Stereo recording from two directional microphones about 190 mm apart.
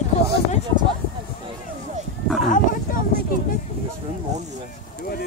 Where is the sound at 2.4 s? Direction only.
45° left (ahead or behind).